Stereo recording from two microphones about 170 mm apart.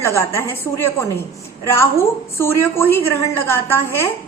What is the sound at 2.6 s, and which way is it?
A woman's voice, 10° left (ahead or behind).